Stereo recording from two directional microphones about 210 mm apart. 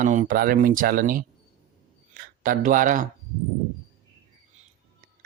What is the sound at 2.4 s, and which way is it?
Speech, 40° right (ahead or behind).